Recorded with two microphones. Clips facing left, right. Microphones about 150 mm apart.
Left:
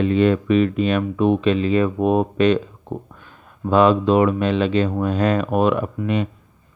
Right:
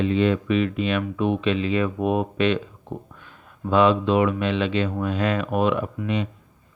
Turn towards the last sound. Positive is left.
turn(degrees=50)  # may be behind; listen again after turning